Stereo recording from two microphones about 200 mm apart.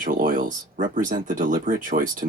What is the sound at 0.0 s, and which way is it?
Speech, 45° right (ahead or behind).